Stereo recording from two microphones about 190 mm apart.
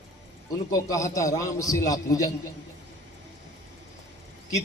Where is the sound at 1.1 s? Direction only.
15° left (ahead or behind).